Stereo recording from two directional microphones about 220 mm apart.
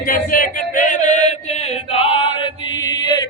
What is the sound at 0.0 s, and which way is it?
Male singing, 40° left (ahead or behind).